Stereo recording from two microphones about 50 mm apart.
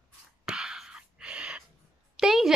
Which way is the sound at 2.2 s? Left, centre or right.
Centre.